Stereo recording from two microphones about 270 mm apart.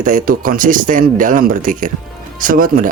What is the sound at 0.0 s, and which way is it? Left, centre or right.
Speech, right.